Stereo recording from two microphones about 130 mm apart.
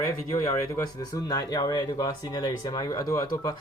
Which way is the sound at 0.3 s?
25° left (ahead or behind).